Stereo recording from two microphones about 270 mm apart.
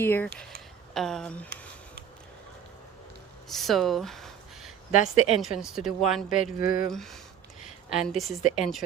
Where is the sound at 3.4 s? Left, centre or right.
Centre.